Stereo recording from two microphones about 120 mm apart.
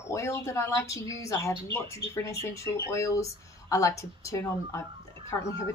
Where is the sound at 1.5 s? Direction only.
45° right (ahead or behind).